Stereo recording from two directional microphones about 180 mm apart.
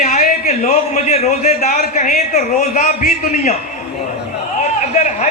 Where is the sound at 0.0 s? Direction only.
40° left (ahead or behind).